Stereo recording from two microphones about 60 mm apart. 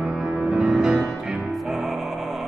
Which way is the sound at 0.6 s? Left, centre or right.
Centre.